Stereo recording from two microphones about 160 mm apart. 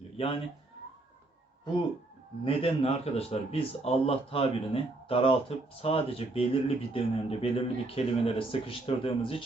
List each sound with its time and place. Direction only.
0.2 s a man's voice: 35° left (ahead or behind)
2.4 s a man's voice: 35° left (ahead or behind)